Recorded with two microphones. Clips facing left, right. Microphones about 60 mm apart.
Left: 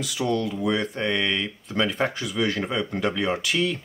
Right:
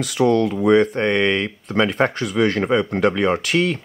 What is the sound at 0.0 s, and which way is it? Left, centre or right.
Speech, right.